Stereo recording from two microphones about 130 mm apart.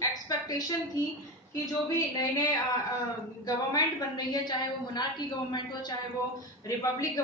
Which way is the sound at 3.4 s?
30° left (ahead or behind).